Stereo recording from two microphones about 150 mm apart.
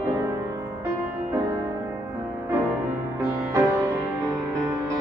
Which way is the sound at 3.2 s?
20° right (ahead or behind).